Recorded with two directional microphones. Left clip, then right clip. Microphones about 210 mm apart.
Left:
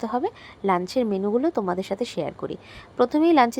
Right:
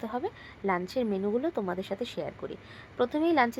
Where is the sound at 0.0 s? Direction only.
30° left (ahead or behind).